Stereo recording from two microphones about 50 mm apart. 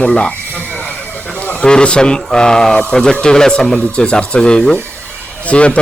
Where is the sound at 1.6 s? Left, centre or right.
Centre.